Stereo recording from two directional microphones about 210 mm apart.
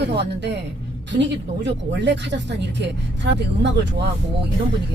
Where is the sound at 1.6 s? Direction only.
55° right (ahead or behind).